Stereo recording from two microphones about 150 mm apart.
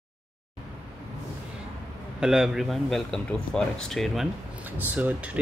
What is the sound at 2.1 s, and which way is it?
A man's voice, 5° right (ahead or behind).